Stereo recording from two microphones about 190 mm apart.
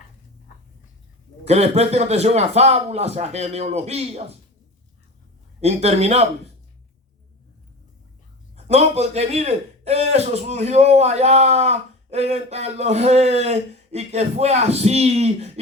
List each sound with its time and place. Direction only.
1.5 s a man's voice: 35° right (ahead or behind)
5.5 s a man's voice: 35° right (ahead or behind)
8.5 s a man's voice: 35° right (ahead or behind)